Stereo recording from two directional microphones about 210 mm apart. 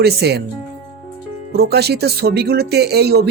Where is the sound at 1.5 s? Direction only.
50° right (ahead or behind).